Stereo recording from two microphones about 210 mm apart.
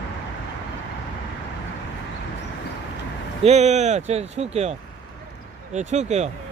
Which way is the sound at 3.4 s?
30° right (ahead or behind).